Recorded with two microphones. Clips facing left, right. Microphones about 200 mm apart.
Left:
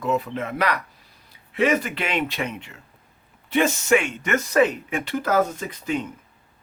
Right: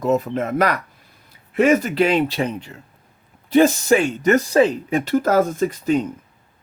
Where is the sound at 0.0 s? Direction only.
40° right (ahead or behind).